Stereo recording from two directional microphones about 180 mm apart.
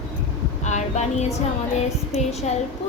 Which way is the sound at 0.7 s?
40° left (ahead or behind).